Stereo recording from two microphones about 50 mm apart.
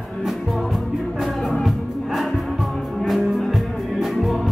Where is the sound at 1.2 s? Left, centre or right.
Centre.